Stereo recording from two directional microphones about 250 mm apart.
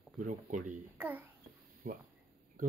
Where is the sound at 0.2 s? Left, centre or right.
Right.